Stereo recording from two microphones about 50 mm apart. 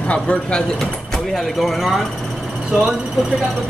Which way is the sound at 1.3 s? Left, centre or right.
Centre.